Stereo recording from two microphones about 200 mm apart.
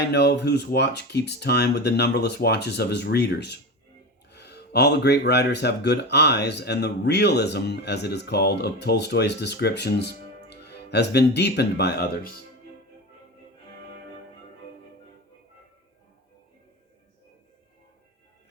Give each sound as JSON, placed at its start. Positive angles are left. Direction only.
{"t": 0.1, "sound": "speech", "side_deg": 55}